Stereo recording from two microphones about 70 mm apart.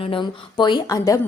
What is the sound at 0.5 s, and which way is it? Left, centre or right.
Speech, left.